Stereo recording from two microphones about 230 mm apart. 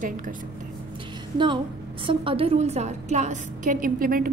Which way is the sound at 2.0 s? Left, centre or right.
Right.